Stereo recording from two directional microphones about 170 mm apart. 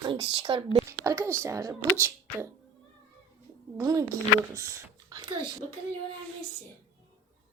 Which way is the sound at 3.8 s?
20° right (ahead or behind).